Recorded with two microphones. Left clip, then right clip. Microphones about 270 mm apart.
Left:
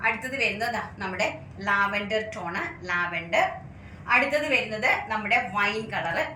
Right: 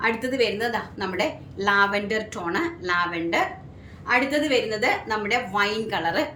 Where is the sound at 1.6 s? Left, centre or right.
Right.